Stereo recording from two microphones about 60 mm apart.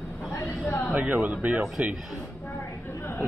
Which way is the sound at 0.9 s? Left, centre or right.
Right.